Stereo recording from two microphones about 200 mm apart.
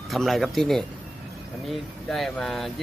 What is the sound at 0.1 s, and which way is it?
Speech, centre (ahead or behind).